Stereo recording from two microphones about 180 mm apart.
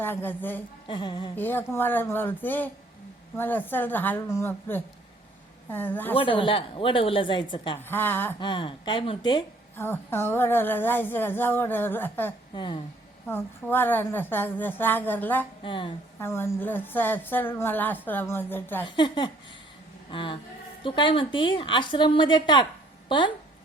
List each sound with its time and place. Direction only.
0.0 s a woman's voice: 10° left (ahead or behind)
0.9 s a woman's voice: 25° left (ahead or behind)
1.4 s a woman's voice: 10° left (ahead or behind)
6.1 s a woman's voice: 30° left (ahead or behind)
7.8 s a woman's voice: 10° left (ahead or behind)
8.4 s a woman's voice: 25° left (ahead or behind)
9.7 s a woman's voice: 10° left (ahead or behind)
12.5 s a woman's voice: 25° left (ahead or behind)
13.2 s a woman's voice: 10° left (ahead or behind)
15.6 s a woman's voice: 30° left (ahead or behind)
16.2 s a woman's voice: 15° left (ahead or behind)
18.9 s a woman's voice: 25° left (ahead or behind)
20.1 s a sound: 30° left (ahead or behind)
20.8 s a woman's voice: 30° left (ahead or behind)